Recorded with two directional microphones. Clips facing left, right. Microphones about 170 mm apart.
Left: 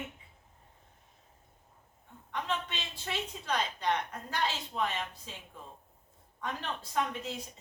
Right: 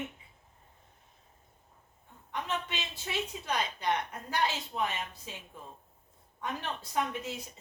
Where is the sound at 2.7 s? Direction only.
10° right (ahead or behind).